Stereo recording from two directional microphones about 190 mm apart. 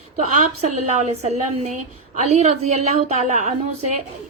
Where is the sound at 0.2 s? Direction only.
40° right (ahead or behind).